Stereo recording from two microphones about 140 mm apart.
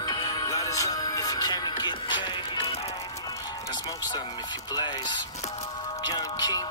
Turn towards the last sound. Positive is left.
turn(degrees=30)  # may be behind; listen again after turning